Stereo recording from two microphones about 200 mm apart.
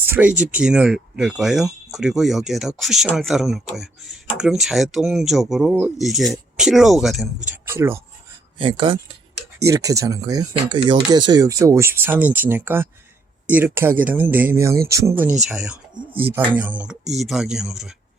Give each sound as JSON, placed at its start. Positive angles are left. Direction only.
{"t": 0.0, "sound": "speech", "side_deg": -10}
{"t": 7.7, "sound": "speech", "side_deg": -15}
{"t": 8.5, "sound": "speech", "side_deg": -25}
{"t": 15.4, "sound": "speech", "side_deg": -5}